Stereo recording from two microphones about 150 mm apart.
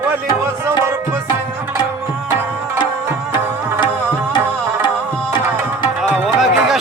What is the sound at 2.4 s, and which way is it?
Music, 15° right (ahead or behind).